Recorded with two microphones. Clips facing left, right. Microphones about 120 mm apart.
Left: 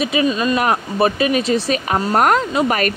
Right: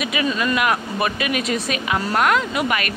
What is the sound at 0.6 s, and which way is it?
Speech, 35° left (ahead or behind).